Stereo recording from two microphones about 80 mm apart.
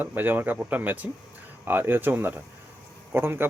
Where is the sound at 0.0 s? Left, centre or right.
Right.